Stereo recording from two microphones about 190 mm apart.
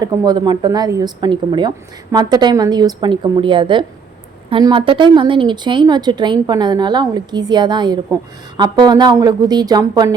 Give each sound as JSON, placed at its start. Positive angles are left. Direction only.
{"t": 0.0, "sound": "speech", "side_deg": -20}